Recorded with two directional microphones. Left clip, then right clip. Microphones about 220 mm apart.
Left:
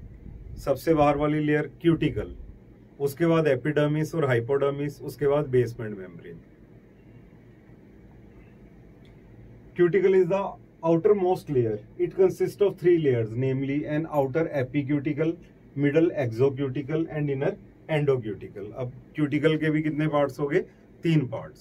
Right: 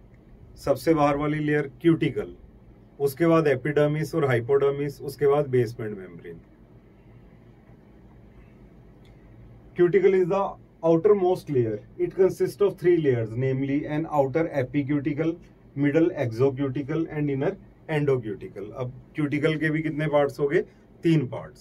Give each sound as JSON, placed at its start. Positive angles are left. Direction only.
{"t": 0.6, "sound": "a man's voice", "side_deg": -20}
{"t": 9.8, "sound": "a man's voice", "side_deg": -10}